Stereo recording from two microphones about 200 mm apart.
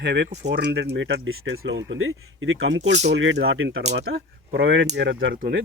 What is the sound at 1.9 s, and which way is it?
Speech, 80° right.